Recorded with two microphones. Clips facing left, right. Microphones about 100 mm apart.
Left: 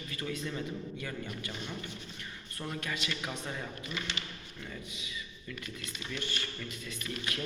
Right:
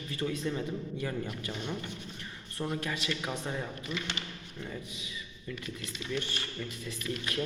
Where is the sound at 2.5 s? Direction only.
25° right (ahead or behind).